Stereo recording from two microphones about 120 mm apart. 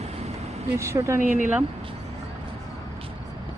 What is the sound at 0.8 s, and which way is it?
Speech, 25° right (ahead or behind).